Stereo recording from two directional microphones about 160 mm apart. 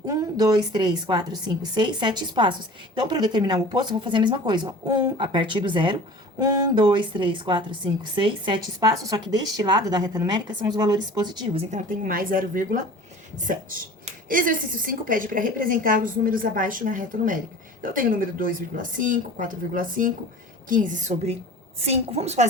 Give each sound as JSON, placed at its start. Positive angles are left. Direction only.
{"t": 0.1, "sound": "a woman's voice", "side_deg": -25}
{"t": 11.7, "sound": "a woman's voice", "side_deg": -55}
{"t": 14.3, "sound": "a woman's voice", "side_deg": -60}